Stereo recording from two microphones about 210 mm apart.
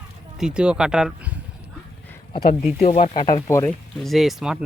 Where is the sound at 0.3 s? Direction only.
5° right (ahead or behind).